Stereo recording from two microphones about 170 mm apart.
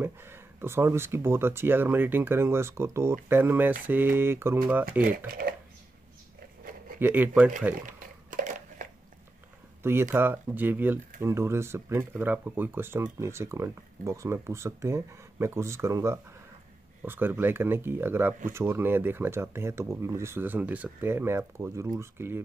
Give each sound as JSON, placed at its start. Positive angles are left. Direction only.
{"t": 0.0, "sound": "speech", "side_deg": -15}
{"t": 7.0, "sound": "speech", "side_deg": -10}
{"t": 7.8, "sound": "a sound", "side_deg": -50}
{"t": 10.1, "sound": "speech", "side_deg": -10}